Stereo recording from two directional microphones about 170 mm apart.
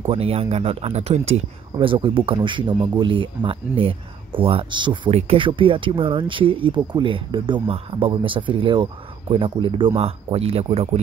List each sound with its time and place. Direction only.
0.0 s speech: 35° right (ahead or behind)